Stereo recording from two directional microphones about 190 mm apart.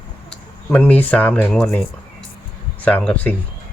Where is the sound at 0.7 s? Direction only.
10° left (ahead or behind).